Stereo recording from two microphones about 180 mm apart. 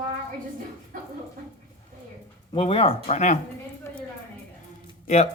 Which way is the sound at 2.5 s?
30° left (ahead or behind).